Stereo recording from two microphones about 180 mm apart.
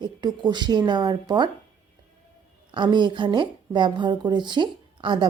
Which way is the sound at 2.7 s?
25° right (ahead or behind).